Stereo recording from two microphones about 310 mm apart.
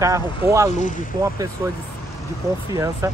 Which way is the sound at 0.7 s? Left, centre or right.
Left.